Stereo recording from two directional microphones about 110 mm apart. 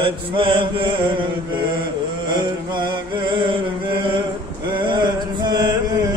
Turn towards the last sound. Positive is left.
turn(degrees=-40)  # may be behind; listen again after turning